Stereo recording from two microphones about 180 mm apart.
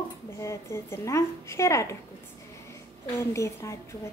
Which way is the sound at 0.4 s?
15° left (ahead or behind).